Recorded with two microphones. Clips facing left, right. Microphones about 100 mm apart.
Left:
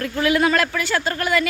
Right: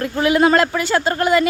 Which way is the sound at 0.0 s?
25° right (ahead or behind).